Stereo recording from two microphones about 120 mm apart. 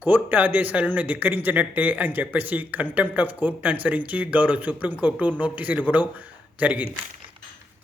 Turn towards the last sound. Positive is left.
turn(degrees=-10)  # may be behind; listen again after turning